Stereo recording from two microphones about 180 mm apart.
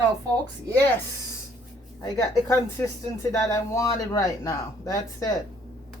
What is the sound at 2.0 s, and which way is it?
Speech, 15° left (ahead or behind).